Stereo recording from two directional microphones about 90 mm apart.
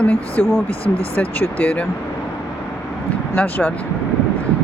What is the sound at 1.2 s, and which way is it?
Speech, 20° left (ahead or behind).